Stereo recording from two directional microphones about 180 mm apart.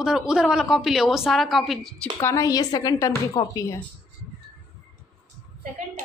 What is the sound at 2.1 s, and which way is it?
A woman's voice, 20° left (ahead or behind).